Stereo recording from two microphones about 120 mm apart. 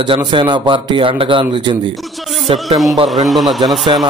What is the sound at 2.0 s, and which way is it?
Music, centre (ahead or behind).